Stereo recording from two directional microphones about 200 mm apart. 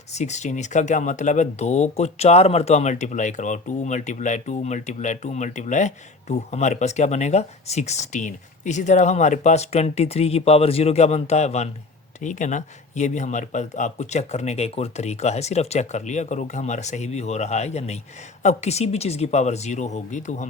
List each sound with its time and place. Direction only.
0.1 s speech: 35° left (ahead or behind)